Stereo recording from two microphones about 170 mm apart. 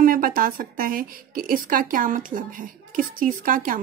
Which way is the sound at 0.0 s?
55° right (ahead or behind).